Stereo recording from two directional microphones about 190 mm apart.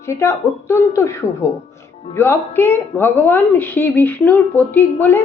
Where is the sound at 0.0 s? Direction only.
15° left (ahead or behind).